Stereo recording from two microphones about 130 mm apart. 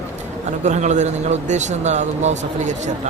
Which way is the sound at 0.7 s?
65° right (ahead or behind).